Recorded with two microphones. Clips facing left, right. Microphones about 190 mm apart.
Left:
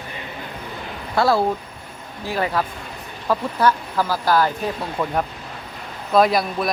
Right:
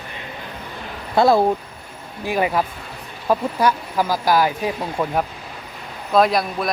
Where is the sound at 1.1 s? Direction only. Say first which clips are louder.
Right 3 dB; 20° right (ahead or behind).